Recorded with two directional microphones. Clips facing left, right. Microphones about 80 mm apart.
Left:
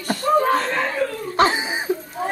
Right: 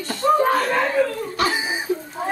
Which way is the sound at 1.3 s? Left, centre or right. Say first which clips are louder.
Left 6 dB; left.